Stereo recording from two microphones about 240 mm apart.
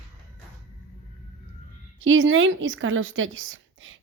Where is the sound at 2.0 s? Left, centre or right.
Right.